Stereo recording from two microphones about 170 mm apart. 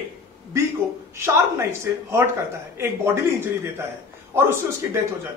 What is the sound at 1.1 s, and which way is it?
Speech, 15° right (ahead or behind).